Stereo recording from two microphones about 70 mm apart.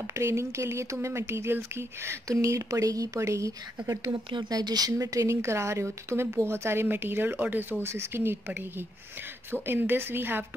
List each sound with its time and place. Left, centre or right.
0.1 s speech: right
4.1 s speech: right
4.9 s speech: right